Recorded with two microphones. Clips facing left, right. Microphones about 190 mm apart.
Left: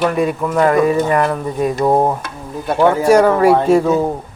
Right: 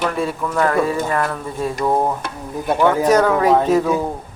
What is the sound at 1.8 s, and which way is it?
Stir, 30° left (ahead or behind).